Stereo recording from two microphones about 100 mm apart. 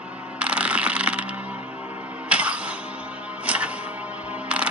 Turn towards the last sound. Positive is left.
turn(degrees=-15)  # may be behind; listen again after turning